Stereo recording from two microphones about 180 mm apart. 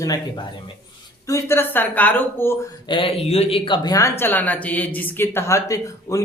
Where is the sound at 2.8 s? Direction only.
30° left (ahead or behind).